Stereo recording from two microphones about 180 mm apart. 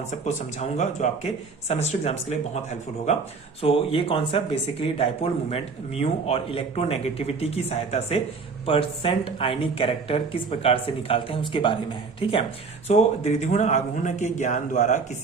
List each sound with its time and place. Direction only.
0.1 s speech: 40° left (ahead or behind)